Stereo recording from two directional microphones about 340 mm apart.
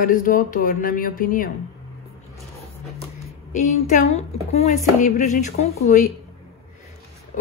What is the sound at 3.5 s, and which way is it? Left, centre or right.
Speech, left.